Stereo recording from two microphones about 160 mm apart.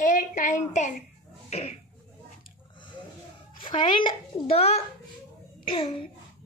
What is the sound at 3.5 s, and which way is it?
A woman's voice, 30° left (ahead or behind).